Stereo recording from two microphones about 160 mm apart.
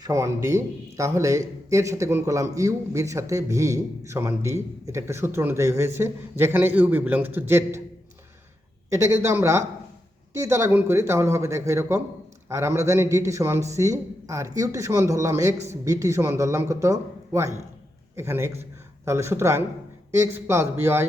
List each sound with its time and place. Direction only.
0.0 s a man's voice: 20° right (ahead or behind)
8.9 s a man's voice: 15° right (ahead or behind)